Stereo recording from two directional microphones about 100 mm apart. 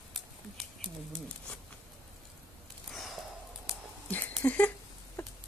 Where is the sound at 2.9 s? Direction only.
Centre (ahead or behind).